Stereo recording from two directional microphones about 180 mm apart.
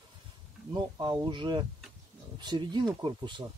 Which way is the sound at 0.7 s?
25° right (ahead or behind).